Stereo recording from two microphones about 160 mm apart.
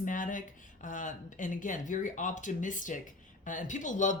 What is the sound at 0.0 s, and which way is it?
Speech, 55° left (ahead or behind).